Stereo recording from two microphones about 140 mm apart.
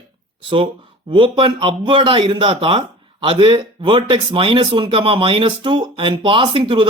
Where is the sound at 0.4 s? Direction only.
40° right (ahead or behind).